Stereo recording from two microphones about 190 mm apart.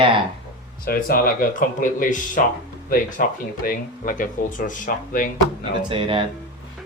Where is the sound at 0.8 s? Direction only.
50° left (ahead or behind).